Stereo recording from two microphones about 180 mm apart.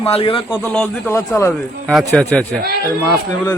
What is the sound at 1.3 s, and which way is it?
Speech, 15° left (ahead or behind).